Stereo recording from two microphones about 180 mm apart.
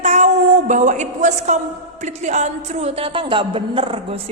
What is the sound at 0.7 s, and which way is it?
A woman's voice, 45° right (ahead or behind).